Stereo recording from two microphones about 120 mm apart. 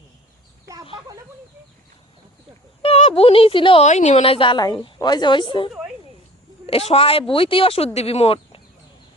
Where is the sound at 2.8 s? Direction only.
55° left (ahead or behind).